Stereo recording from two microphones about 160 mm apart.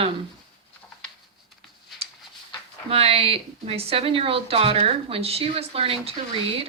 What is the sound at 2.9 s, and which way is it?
A woman's voice, 40° right (ahead or behind).